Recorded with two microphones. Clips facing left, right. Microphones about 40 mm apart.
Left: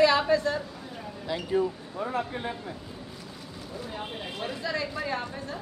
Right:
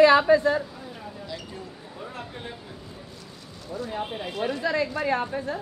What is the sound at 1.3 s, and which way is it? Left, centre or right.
Speech, left.